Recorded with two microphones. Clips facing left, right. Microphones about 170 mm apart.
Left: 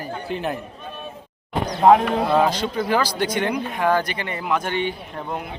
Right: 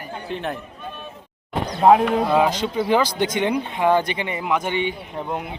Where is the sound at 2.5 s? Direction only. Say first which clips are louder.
Right 2 dB; 20° right (ahead or behind).